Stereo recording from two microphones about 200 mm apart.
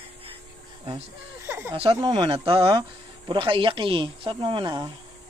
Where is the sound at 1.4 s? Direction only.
10° right (ahead or behind).